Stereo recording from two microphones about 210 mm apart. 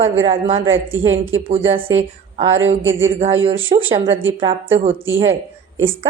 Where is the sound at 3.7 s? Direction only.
25° right (ahead or behind).